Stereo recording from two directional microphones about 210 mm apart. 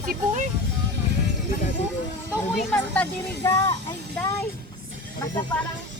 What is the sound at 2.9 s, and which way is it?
Speech, 10° left (ahead or behind).